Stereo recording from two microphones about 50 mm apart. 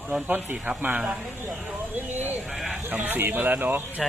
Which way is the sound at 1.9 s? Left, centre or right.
Right.